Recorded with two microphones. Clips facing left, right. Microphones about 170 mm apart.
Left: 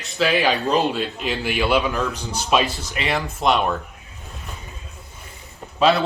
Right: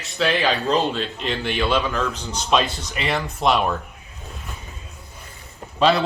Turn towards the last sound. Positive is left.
turn(degrees=0)  # may be behind; listen again after turning